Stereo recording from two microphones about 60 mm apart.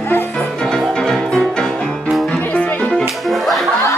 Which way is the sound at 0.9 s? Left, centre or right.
Centre.